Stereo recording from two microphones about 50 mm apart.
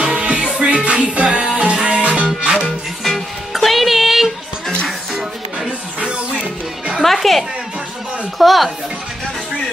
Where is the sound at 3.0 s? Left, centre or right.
Centre.